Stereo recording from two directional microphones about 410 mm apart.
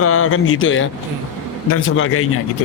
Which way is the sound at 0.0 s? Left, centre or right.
Left.